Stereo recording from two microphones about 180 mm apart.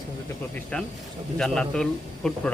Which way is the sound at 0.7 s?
5° left (ahead or behind).